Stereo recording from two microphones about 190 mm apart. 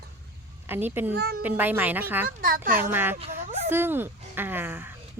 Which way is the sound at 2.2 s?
50° right (ahead or behind).